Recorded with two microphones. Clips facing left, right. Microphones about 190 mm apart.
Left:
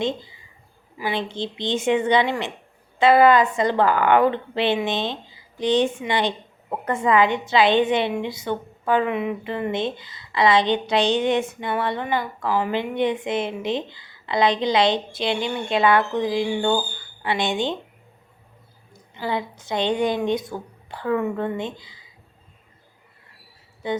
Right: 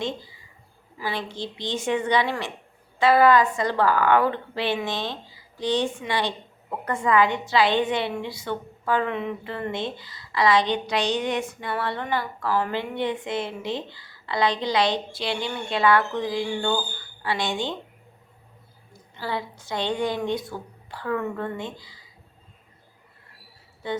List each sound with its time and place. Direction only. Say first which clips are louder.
0.0 s speech: left 5 dB; 20° left (ahead or behind)
19.1 s speech: left 4 dB; 20° left (ahead or behind)
23.8 s speech: left 3 dB; 20° left (ahead or behind)